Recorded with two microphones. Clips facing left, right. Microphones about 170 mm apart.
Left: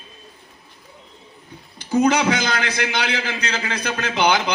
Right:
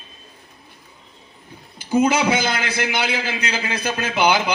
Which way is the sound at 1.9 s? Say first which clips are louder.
Even; 10° right (ahead or behind).